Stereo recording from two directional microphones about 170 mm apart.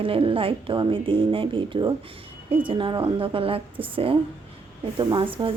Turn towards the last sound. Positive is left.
turn(degrees=-30)  # may be behind; listen again after turning